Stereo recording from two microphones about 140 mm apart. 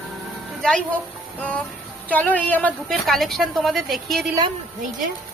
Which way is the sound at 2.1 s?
10° left (ahead or behind).